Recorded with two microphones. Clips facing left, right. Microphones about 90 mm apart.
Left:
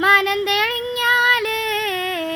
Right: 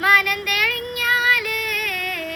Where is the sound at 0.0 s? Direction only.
30° left (ahead or behind).